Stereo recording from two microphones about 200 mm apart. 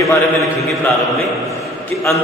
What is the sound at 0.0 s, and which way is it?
Speech, 15° left (ahead or behind).